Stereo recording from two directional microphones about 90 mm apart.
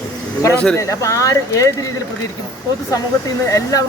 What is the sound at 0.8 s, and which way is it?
Speech, 35° left (ahead or behind).